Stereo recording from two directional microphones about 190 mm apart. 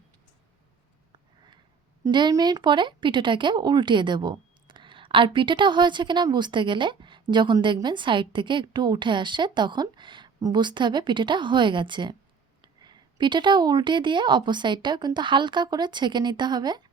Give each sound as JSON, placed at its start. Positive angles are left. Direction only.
{"t": 2.0, "sound": "speech", "side_deg": -25}